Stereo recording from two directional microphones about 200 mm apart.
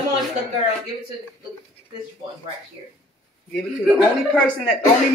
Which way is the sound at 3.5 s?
5° left (ahead or behind).